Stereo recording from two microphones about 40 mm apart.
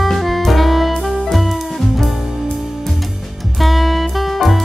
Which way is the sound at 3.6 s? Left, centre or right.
Centre.